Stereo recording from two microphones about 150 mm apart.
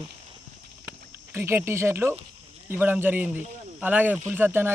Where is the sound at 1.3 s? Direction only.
15° right (ahead or behind).